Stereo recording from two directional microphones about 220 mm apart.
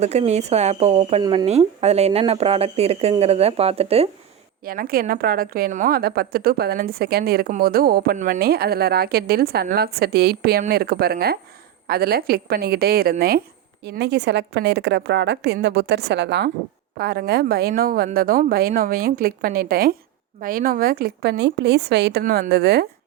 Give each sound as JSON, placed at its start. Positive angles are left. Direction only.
{"t": 0.0, "sound": "speech", "side_deg": -30}
{"t": 4.6, "sound": "a woman's voice", "side_deg": -40}